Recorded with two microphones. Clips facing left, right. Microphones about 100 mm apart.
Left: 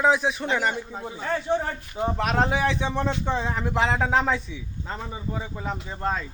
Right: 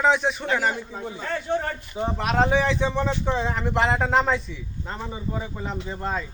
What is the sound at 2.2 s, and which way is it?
Speech, centre (ahead or behind).